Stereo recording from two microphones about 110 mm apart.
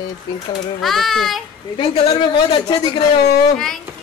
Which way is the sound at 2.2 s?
50° left (ahead or behind).